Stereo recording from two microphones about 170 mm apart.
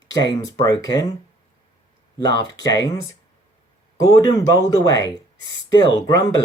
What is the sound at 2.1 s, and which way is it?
Speech, 25° left (ahead or behind).